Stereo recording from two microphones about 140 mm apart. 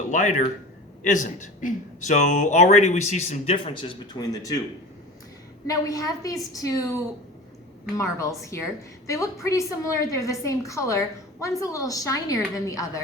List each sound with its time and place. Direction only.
0.1 s a man's voice: 60° left (ahead or behind); by 4.6 s 25° left (ahead or behind)
5.6 s a woman's voice: 25° left (ahead or behind)
7.9 s a woman's voice: 20° left (ahead or behind)